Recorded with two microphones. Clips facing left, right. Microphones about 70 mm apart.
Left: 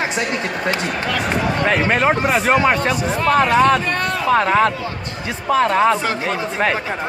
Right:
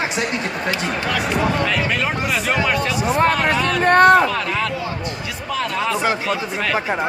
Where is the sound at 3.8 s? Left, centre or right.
Right.